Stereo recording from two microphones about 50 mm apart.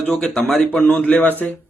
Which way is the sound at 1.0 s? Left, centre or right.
Left.